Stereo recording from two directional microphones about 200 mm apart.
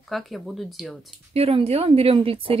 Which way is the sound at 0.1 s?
Centre (ahead or behind).